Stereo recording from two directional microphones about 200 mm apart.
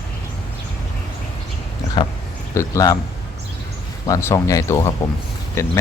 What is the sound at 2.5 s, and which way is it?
Speech, 15° left (ahead or behind).